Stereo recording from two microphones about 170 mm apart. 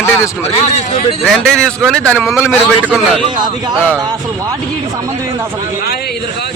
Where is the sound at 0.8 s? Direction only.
45° left (ahead or behind).